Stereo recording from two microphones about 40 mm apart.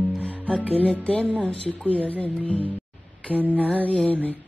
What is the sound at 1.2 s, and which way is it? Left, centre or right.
Speech, centre.